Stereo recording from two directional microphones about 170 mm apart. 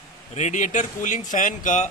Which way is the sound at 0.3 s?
45° left (ahead or behind).